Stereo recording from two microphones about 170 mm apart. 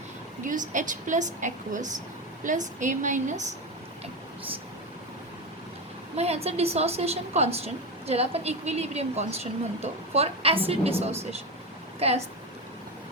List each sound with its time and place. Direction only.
0.4 s a woman's voice: 50° right (ahead or behind)
6.1 s a woman's voice: 40° right (ahead or behind)